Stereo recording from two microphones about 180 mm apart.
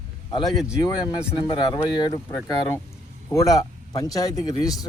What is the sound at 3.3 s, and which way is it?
Speech, 20° left (ahead or behind).